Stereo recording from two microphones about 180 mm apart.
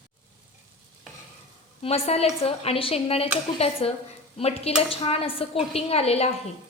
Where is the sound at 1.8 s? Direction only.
35° left (ahead or behind).